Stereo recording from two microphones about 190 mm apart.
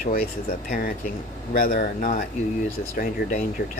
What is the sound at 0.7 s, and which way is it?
Speech, 45° left (ahead or behind).